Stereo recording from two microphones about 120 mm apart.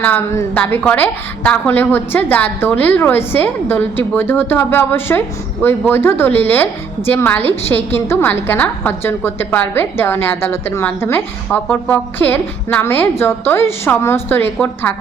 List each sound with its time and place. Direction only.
0.0 s a woman's voice: 15° left (ahead or behind)